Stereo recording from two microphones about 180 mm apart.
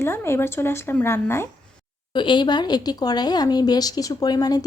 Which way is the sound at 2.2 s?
25° left (ahead or behind).